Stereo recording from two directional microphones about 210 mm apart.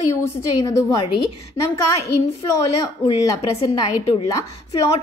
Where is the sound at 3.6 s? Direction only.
20° left (ahead or behind).